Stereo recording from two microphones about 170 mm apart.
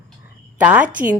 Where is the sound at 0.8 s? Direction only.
50° right (ahead or behind).